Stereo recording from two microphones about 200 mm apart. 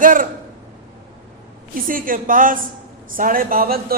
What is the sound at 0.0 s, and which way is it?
Speech, 45° right (ahead or behind).